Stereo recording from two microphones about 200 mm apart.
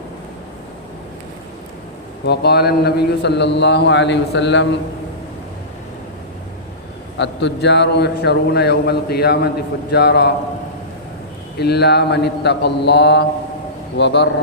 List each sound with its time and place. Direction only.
2.2 s a man's voice: 55° left (ahead or behind)
7.2 s a man's voice: 60° left (ahead or behind)
11.6 s a man's voice: 55° left (ahead or behind)